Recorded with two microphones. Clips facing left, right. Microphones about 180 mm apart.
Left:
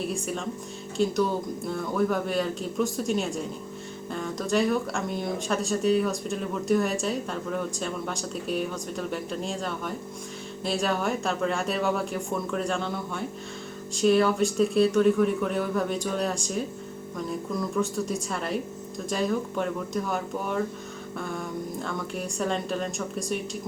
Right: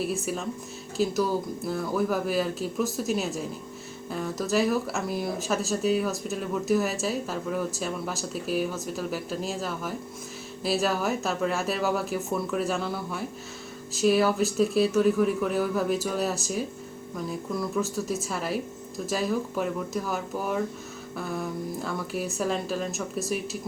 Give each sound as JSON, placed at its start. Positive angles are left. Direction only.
{"t": 0.0, "sound": "speech", "side_deg": -5}